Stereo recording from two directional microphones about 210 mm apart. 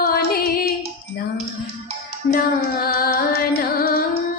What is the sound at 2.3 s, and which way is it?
Music, 45° left (ahead or behind).